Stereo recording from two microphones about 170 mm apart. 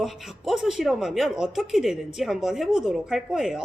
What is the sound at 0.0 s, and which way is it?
A woman's voice, centre (ahead or behind).